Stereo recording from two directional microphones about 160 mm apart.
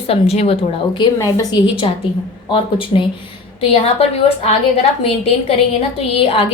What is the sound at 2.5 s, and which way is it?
A woman's voice, 30° left (ahead or behind).